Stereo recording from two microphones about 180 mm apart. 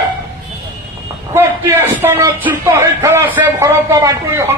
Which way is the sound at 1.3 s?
15° right (ahead or behind).